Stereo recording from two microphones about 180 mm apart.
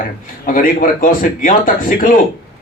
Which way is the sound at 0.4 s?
50° left (ahead or behind).